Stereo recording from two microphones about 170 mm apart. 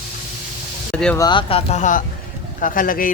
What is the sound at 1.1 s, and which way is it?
A man's voice, 25° left (ahead or behind).